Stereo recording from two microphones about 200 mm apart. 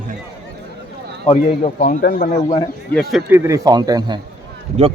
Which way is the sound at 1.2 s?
35° left (ahead or behind).